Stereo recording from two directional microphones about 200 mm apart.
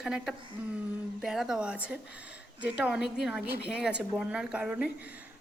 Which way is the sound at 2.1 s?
60° left (ahead or behind).